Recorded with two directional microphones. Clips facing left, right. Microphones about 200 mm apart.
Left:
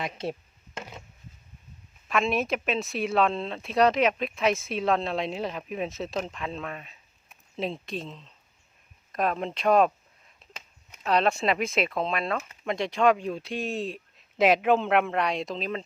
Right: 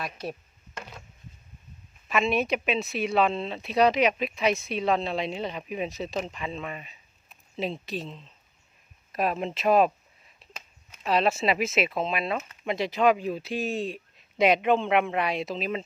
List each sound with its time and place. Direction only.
0.0 s speech: 25° left (ahead or behind)
2.0 s speech: centre (ahead or behind)
11.0 s speech: centre (ahead or behind)